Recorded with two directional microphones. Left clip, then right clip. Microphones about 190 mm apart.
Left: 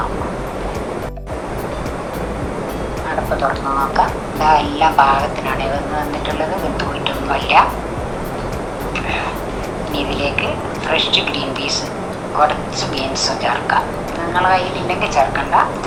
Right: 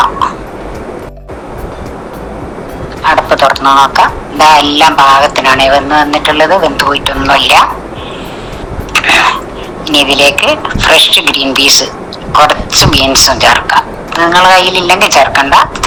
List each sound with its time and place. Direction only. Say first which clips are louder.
3.1 s speech: right 13 dB; 65° right (ahead or behind)
8.9 s a sound: right 16 dB; 70° right (ahead or behind)
9.9 s speech: right 14 dB; 70° right (ahead or behind)